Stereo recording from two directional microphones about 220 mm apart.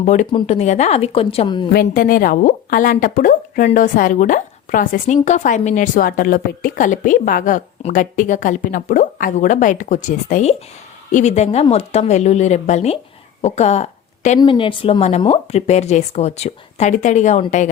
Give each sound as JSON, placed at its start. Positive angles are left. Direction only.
{"t": 0.0, "sound": "a woman's voice", "side_deg": 35}
{"t": 1.7, "sound": "a woman's voice", "side_deg": 40}